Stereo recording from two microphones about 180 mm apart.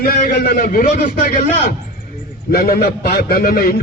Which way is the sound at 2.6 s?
60° left (ahead or behind).